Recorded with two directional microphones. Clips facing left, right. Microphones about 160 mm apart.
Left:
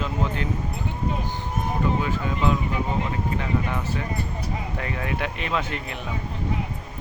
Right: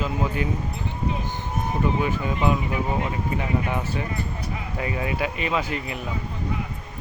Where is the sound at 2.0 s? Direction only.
15° right (ahead or behind).